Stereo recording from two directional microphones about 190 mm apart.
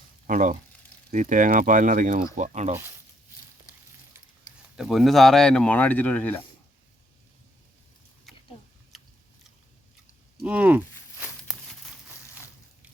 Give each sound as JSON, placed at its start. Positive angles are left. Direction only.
{"t": 0.3, "sound": "speech", "side_deg": -40}
{"t": 4.8, "sound": "speech", "side_deg": 0}
{"t": 8.3, "sound": "a sound", "side_deg": 0}
{"t": 8.9, "sound": "biting", "side_deg": 0}
{"t": 10.4, "sound": "speech", "side_deg": -5}